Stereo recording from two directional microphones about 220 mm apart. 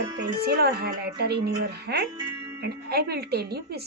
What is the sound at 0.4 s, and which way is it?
Speech, 50° right (ahead or behind).